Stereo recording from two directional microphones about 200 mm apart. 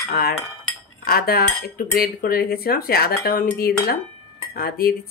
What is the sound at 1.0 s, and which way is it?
Cutlery, 50° left (ahead or behind).